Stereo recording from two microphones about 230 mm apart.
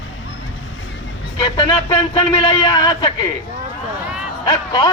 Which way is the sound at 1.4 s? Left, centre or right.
Centre.